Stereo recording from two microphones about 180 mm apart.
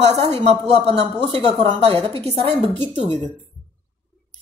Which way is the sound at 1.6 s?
35° right (ahead or behind).